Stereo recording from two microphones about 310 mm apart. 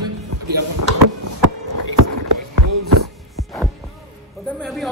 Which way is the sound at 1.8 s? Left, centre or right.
Right.